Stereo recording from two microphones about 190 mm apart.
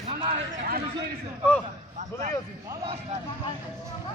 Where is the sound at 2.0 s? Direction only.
40° right (ahead or behind).